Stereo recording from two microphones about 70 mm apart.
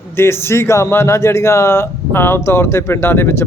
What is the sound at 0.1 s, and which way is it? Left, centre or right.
Speech, left.